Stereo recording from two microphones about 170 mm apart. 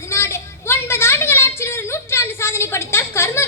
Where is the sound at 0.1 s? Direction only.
15° left (ahead or behind).